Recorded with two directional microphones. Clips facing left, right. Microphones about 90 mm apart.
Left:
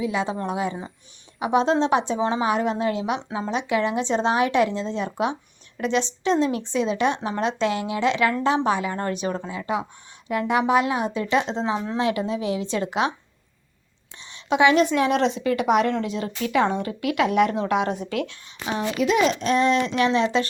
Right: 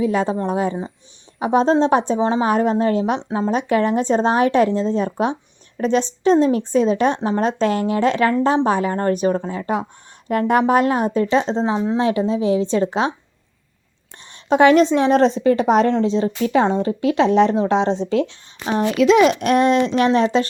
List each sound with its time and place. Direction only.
0.0 s speech: 40° right (ahead or behind)
14.5 s speech: 45° right (ahead or behind)
14.8 s speech: 30° right (ahead or behind)
18.7 s speech: 55° right (ahead or behind)
18.9 s a child's voice: 90° right
19.3 s speech: 55° right (ahead or behind); by 20.5 s 35° right (ahead or behind)